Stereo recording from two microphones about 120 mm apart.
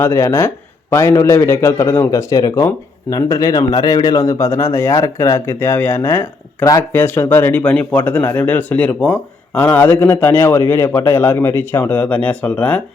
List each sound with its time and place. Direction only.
0.0 s a man's voice: 20° left (ahead or behind)